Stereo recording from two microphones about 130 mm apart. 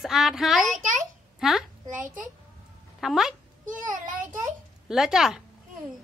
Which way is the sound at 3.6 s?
90° right.